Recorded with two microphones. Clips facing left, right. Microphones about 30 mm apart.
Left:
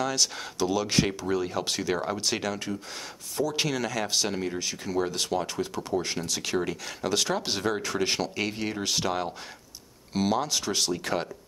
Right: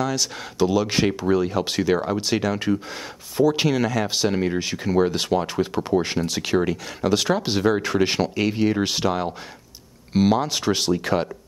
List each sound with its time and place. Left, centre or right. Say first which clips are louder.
0.0 s speech: right 3 dB; centre
2.5 s speech: right 9 dB; right
7.8 s speech: right 7 dB; right
8.4 s speech: right 9 dB; centre
8.7 s speech: right 6 dB; right
10.1 s speech: right 6 dB; centre